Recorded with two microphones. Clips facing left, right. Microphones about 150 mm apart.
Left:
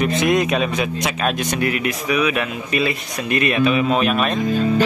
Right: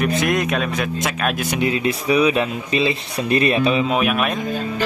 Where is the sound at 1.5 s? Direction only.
25° right (ahead or behind).